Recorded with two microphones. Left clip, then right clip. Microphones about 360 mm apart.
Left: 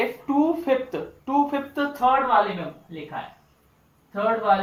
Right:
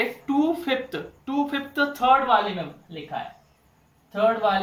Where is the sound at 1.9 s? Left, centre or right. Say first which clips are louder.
Right 1 dB; centre.